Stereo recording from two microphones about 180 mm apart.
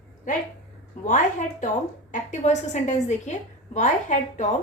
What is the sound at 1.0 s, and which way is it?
A woman's voice, 45° left (ahead or behind).